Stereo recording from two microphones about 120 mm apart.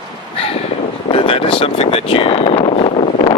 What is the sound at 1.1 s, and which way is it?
Speech, 50° left (ahead or behind).